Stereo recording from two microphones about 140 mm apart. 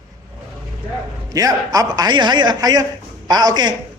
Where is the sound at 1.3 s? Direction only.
25° right (ahead or behind).